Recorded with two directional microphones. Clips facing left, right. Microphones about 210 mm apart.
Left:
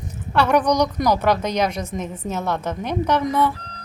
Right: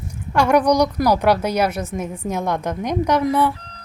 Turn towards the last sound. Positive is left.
turn(degrees=-10)  # may be behind; listen again after turning